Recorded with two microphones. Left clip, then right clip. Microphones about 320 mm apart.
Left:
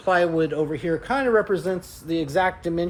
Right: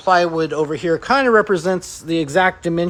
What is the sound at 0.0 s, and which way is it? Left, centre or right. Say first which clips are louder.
A man's voice: right 5 dB; centre.